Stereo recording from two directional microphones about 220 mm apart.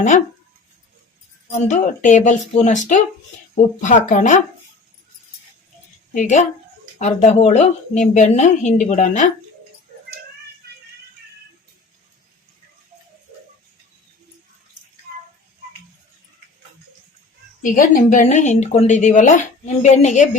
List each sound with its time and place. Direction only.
1.5 s speech: 35° left (ahead or behind)
6.1 s speech: 30° left (ahead or behind)
17.6 s speech: 35° left (ahead or behind)